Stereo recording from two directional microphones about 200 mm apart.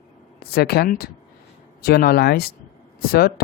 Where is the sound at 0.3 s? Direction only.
50° left (ahead or behind).